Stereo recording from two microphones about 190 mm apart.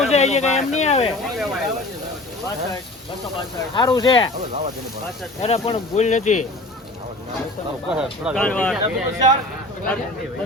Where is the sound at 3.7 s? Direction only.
20° left (ahead or behind).